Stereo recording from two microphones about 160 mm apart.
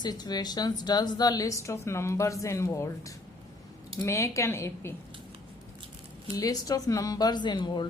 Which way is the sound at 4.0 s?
20° left (ahead or behind).